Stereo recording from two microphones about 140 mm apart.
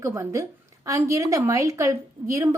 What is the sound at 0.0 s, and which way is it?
A woman's voice, 20° right (ahead or behind).